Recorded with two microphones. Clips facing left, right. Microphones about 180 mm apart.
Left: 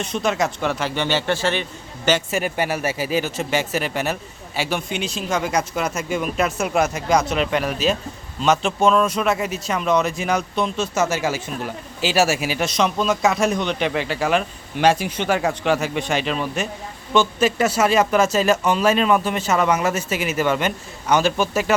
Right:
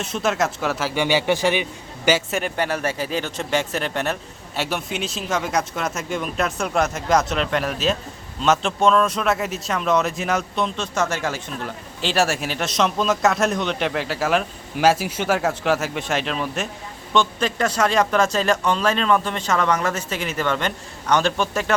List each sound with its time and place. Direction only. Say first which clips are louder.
0.0 s a man's voice: left 1 dB; centre (ahead or behind)
2.4 s a man's voice: left 1 dB; 10° left (ahead or behind)